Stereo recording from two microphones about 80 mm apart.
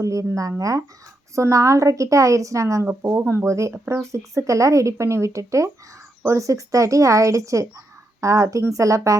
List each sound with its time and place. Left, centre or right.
0.0 s a woman's voice: right